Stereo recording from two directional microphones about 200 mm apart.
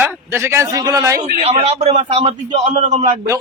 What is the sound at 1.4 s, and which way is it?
A man's voice, 30° right (ahead or behind).